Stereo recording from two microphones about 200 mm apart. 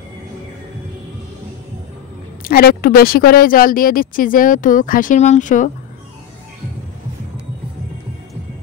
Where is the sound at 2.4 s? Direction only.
50° left (ahead or behind).